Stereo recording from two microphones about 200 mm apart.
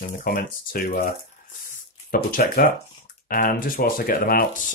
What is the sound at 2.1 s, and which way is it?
Speech, 45° left (ahead or behind).